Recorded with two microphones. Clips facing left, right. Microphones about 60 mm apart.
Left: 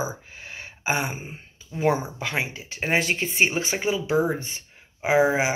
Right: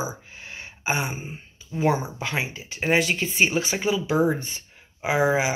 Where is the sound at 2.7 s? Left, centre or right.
Left.